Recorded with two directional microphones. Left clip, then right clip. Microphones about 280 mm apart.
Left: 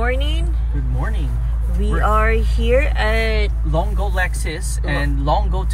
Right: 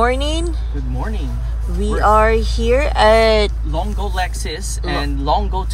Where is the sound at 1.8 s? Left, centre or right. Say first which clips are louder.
Right 6 dB; centre.